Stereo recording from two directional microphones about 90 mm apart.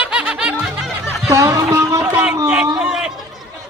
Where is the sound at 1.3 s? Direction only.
30° right (ahead or behind).